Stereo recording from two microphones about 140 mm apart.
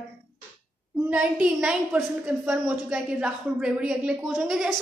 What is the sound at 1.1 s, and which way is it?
A woman's voice, 5° right (ahead or behind).